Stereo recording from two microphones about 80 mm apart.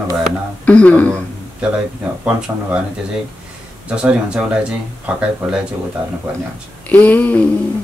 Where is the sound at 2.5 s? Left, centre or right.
Right.